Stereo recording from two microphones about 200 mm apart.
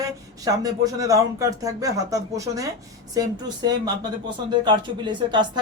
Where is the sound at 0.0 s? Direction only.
20° right (ahead or behind).